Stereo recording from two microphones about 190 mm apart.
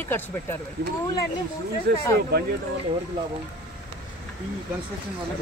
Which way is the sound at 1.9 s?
60° right (ahead or behind).